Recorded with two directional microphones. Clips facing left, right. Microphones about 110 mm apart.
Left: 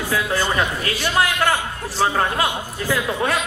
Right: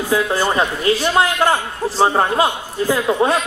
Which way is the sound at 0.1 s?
25° right (ahead or behind).